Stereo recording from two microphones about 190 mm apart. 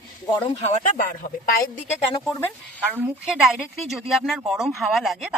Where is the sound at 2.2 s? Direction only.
10° left (ahead or behind).